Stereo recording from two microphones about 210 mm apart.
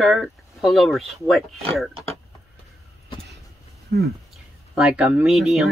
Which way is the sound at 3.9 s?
50° right (ahead or behind).